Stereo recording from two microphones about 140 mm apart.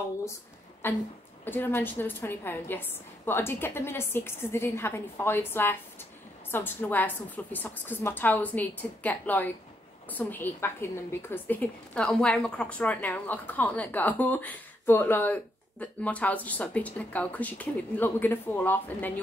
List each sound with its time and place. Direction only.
0.8 s a woman's voice: 15° left (ahead or behind)